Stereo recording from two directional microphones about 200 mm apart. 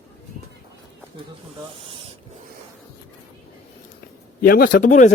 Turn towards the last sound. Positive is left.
turn(degrees=40)  # may be behind; listen again after turning